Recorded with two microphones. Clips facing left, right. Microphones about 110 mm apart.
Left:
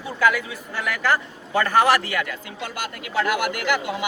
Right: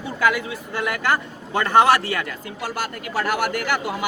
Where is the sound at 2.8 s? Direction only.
40° right (ahead or behind).